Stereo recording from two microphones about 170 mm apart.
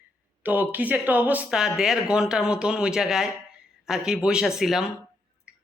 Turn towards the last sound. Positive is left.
turn(degrees=0)  # may be behind; listen again after turning